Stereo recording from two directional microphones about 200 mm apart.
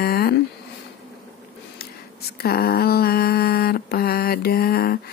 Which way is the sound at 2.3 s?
50° left (ahead or behind).